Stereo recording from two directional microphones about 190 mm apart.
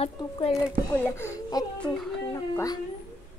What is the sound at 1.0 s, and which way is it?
A woman's voice, 15° left (ahead or behind).